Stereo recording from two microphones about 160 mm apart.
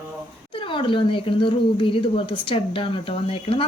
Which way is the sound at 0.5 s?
35° left (ahead or behind).